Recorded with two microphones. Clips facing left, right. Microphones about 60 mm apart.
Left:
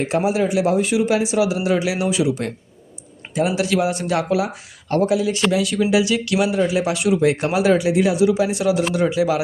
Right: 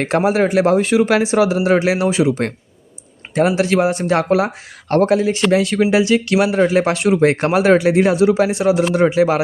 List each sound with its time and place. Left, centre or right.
0.0 s speech: right
1.2 s speech: right